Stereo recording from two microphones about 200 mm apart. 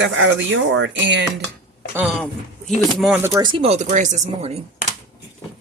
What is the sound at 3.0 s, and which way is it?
Speech, 5° right (ahead or behind).